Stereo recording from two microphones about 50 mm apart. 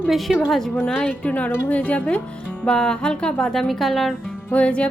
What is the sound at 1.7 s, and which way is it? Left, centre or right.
Speech, left.